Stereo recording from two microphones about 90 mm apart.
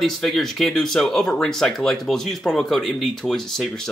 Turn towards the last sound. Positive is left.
turn(degrees=0)  # may be behind; listen again after turning